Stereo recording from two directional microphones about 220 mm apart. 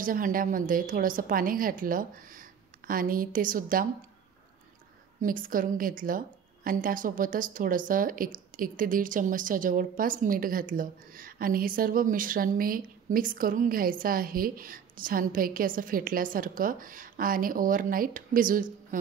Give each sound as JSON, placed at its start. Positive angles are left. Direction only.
{"t": 0.0, "sound": "a woman's voice", "side_deg": -40}
{"t": 5.2, "sound": "a woman's voice", "side_deg": -40}